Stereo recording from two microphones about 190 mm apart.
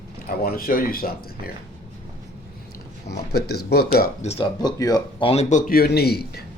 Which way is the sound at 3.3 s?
60° left (ahead or behind).